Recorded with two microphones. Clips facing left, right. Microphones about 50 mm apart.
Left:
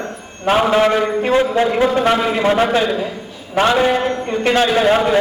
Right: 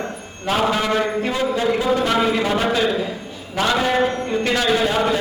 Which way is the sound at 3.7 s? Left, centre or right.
Centre.